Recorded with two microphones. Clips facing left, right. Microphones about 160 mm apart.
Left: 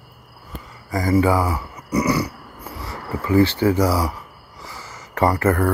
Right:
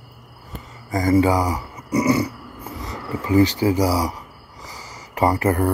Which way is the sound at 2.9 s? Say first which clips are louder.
Even; 15° right (ahead or behind).